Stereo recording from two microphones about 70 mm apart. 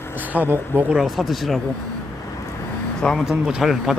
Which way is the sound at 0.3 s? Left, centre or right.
Right.